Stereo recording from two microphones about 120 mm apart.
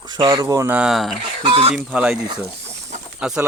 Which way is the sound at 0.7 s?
5° right (ahead or behind).